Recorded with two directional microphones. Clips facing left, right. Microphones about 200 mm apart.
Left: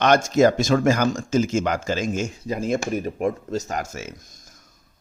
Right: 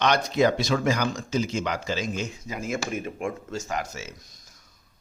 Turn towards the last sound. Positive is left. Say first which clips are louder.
# left 2 dB
turn(degrees=45)  # may be behind; listen again after turning